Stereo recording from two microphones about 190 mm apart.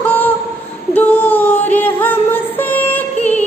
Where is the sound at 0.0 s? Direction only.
10° left (ahead or behind).